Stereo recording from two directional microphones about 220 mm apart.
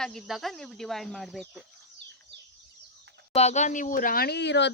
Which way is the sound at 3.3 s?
30° left (ahead or behind).